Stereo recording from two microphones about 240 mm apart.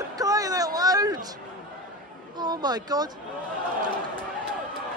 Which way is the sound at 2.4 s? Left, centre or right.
Centre.